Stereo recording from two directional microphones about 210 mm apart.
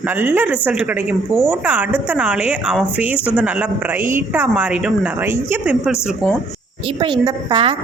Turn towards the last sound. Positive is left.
turn(degrees=-25)  # may be behind; listen again after turning